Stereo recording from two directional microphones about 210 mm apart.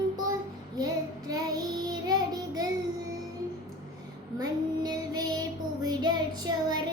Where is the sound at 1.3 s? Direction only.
20° right (ahead or behind).